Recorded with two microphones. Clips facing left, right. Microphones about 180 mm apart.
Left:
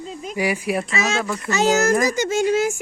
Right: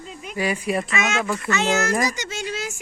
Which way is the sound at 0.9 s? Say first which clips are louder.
Left 1 dB; 35° left (ahead or behind).